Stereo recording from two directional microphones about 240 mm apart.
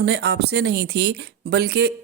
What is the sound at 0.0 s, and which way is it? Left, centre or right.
A man's voice, right.